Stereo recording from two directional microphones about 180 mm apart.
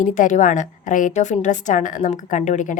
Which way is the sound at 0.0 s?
45° left (ahead or behind).